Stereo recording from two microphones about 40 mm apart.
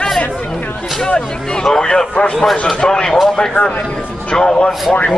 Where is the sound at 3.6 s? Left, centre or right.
Left.